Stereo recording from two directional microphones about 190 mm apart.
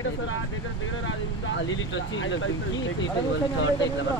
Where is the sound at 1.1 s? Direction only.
75° left (ahead or behind).